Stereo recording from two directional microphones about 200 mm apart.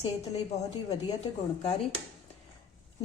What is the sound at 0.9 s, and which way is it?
Speech, 30° left (ahead or behind).